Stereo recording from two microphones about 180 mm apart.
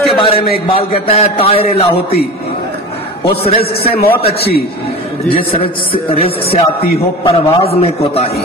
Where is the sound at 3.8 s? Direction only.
60° left (ahead or behind).